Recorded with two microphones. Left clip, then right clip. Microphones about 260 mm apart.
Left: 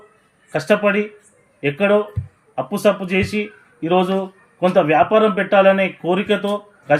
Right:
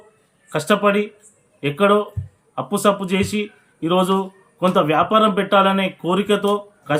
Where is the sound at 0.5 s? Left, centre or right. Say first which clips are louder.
Left 1 dB; centre.